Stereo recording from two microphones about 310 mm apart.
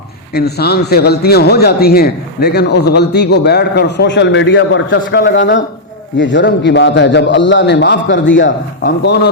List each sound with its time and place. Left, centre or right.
0.3 s speech: left